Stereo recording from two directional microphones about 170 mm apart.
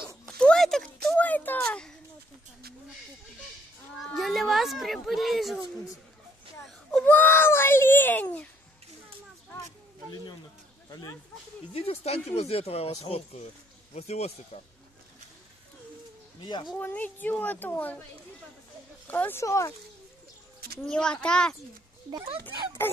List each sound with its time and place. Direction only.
0.3 s a sound: 5° left (ahead or behind)
4.0 s a child's voice: centre (ahead or behind)
6.6 s whimper: 5° left (ahead or behind)
10.9 s speech: 20° left (ahead or behind)
11.7 s speech: 35° left (ahead or behind)
16.7 s speech: 10° left (ahead or behind)
19.0 s speech: 10° left (ahead or behind)
20.8 s a child's voice: 5° left (ahead or behind)
22.1 s speech: 30° right (ahead or behind)